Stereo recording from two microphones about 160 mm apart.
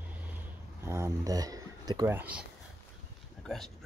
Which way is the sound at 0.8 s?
15° right (ahead or behind).